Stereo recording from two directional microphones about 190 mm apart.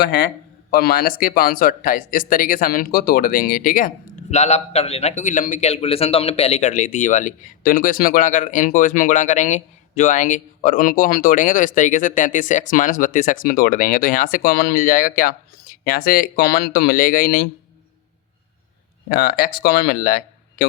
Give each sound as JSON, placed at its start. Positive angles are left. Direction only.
{"t": 0.0, "sound": "speech", "side_deg": 60}
{"t": 19.1, "sound": "speech", "side_deg": 55}